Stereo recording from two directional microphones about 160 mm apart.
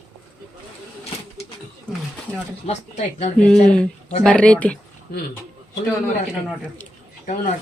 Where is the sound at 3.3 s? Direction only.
5° left (ahead or behind).